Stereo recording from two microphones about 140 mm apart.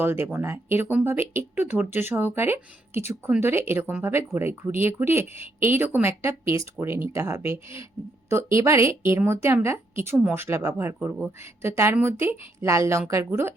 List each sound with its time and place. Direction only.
0.0 s a woman's voice: 15° right (ahead or behind)